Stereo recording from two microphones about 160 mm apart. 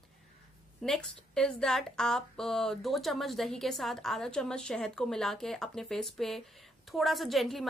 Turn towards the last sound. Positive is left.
turn(degrees=0)  # may be behind; listen again after turning